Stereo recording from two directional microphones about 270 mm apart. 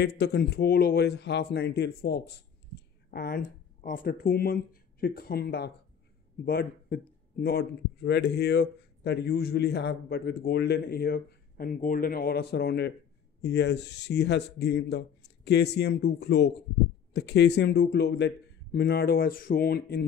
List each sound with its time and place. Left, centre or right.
0.0 s a man's voice: left